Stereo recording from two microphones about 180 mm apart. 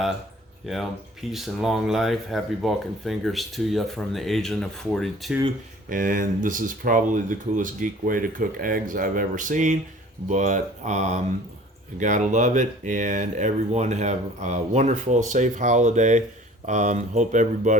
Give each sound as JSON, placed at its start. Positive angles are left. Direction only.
{"t": 0.6, "sound": "speech", "side_deg": 0}
{"t": 5.9, "sound": "speech", "side_deg": -50}